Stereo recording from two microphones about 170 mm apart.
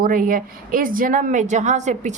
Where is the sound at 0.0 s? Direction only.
55° right (ahead or behind).